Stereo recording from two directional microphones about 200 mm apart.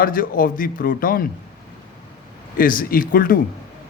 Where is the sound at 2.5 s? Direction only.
45° left (ahead or behind).